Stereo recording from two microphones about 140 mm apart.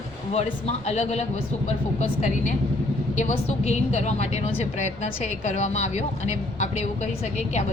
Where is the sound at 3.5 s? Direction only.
55° left (ahead or behind).